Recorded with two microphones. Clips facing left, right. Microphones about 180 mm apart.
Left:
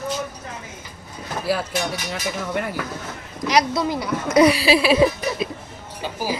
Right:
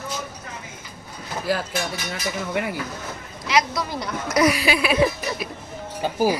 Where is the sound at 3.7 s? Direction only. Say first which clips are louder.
Left 5 dB; 25° left (ahead or behind).